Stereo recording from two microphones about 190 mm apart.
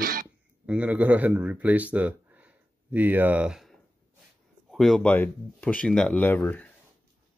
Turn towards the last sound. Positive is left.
turn(degrees=10)  # may be behind; listen again after turning